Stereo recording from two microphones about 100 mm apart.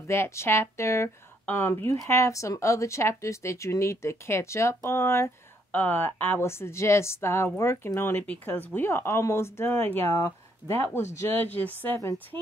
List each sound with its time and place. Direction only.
0.0 s speech: 25° left (ahead or behind)
10.0 s speech: 35° left (ahead or behind)
10.7 s speech: 25° left (ahead or behind)